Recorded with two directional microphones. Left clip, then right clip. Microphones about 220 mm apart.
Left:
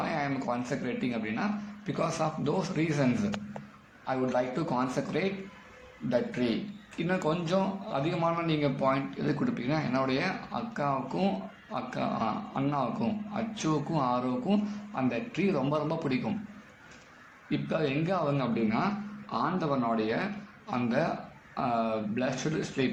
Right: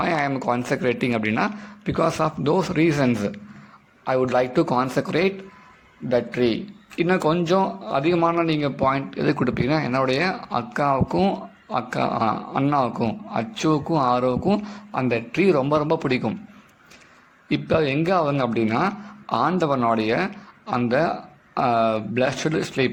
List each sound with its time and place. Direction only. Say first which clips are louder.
0.0 s a man's voice: right 9 dB; 45° right (ahead or behind)
17.5 s a man's voice: right 9 dB; 45° right (ahead or behind)